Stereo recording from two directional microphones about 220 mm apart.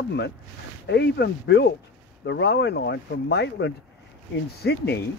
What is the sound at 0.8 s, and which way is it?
Speech, 50° left (ahead or behind).